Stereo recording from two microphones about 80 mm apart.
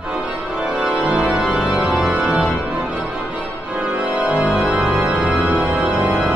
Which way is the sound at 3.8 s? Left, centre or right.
Centre.